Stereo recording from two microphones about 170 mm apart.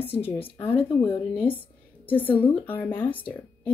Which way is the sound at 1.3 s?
10° left (ahead or behind).